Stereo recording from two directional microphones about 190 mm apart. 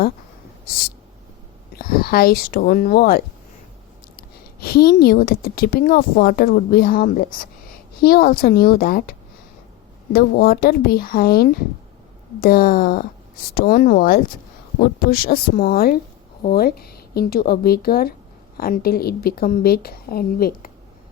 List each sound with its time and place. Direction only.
1.7 s speech: 50° left (ahead or behind)